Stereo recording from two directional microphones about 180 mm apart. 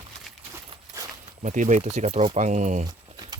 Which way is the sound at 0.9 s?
20° right (ahead or behind).